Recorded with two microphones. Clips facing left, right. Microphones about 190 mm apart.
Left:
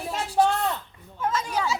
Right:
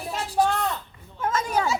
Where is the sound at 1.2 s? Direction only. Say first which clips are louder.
Right 2 dB; 50° right (ahead or behind).